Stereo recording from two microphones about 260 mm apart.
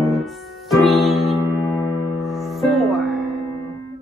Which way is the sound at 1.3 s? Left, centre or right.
Centre.